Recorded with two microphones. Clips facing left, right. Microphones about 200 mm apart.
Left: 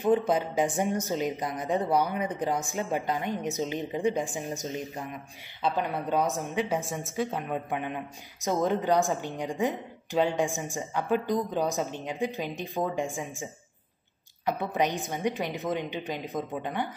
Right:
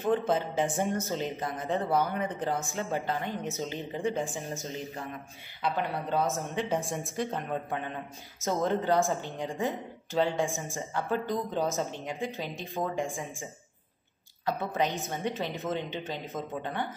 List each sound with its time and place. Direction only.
0.0 s speech: 15° left (ahead or behind)
6.9 s speech: centre (ahead or behind)